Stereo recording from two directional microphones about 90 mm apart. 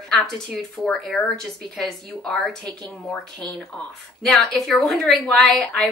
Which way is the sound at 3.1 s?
15° left (ahead or behind).